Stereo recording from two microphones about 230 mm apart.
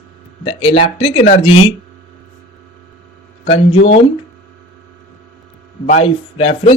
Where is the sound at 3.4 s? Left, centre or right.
Left.